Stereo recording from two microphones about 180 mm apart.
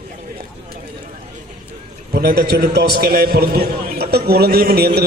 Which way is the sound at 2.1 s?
60° right (ahead or behind).